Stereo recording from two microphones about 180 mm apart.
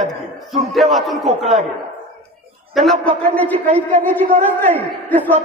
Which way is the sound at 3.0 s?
10° left (ahead or behind).